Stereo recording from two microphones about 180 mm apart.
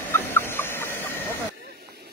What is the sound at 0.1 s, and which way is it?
Chicken, 10° left (ahead or behind).